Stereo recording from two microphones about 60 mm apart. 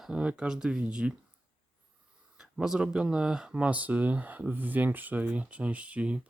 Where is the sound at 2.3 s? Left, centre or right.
Centre.